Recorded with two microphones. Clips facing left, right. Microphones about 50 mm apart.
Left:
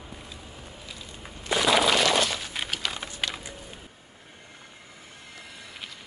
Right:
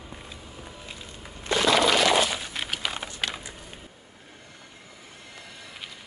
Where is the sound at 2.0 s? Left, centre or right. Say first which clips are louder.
Right 2 dB; centre.